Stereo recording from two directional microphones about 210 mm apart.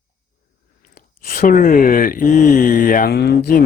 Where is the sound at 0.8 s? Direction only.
45° left (ahead or behind).